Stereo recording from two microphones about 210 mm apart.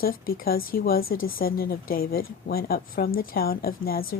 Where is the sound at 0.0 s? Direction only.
45° left (ahead or behind).